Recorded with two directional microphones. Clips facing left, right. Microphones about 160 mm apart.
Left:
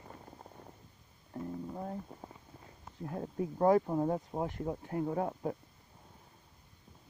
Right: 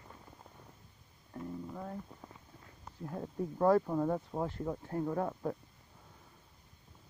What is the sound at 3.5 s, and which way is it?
Speech, 25° left (ahead or behind).